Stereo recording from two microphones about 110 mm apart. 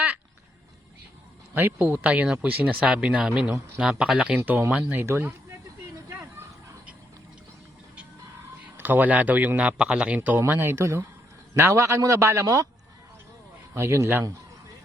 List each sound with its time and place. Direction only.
1.5 s speech: 20° right (ahead or behind)
4.4 s speech: 20° right (ahead or behind)
8.8 s speech: 15° right (ahead or behind)
10.2 s speech: 20° right (ahead or behind)
13.7 s speech: 25° right (ahead or behind)